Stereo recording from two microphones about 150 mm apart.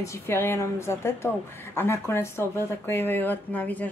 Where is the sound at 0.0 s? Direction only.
15° left (ahead or behind).